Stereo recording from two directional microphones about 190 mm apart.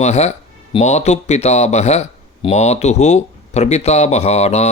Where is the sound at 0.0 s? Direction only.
35° left (ahead or behind).